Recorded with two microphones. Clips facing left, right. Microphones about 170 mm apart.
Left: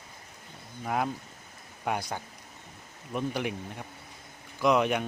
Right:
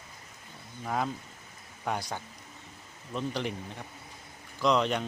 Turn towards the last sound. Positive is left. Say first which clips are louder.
# left 2 dB
turn(degrees=10)  # may be behind; listen again after turning